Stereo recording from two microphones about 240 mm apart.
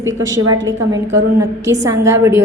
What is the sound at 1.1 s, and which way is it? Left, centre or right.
A woman's voice, centre.